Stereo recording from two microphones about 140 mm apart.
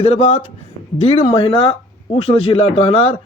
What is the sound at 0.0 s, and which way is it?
A man's voice, 45° left (ahead or behind).